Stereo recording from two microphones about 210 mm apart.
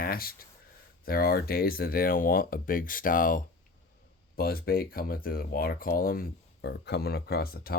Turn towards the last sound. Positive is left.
turn(degrees=45)  # may be behind; listen again after turning